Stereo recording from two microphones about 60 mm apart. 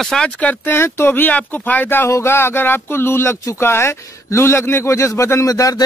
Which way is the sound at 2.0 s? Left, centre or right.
Left.